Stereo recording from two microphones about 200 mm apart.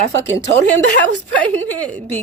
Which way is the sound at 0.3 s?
65° right (ahead or behind).